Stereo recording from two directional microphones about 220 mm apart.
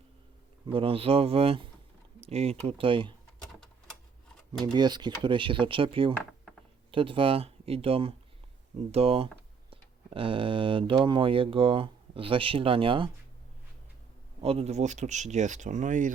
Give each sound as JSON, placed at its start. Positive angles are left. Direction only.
{"t": 0.7, "sound": "speech", "side_deg": -25}
{"t": 4.6, "sound": "speech", "side_deg": -20}
{"t": 14.4, "sound": "speech", "side_deg": -25}